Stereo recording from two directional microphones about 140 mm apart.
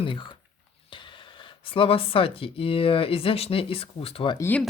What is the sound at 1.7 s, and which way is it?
Speech, 40° left (ahead or behind).